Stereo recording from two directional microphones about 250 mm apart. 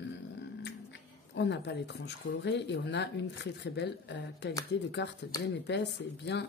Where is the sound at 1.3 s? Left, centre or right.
Left.